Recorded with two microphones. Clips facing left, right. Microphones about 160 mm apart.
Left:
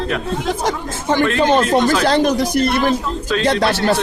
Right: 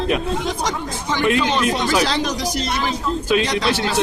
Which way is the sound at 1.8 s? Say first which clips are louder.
Left 3 dB; 10° right (ahead or behind).